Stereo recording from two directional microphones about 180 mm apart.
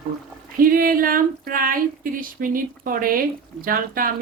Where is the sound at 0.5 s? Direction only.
50° right (ahead or behind).